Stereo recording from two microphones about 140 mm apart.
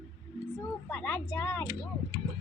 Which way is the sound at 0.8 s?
15° left (ahead or behind).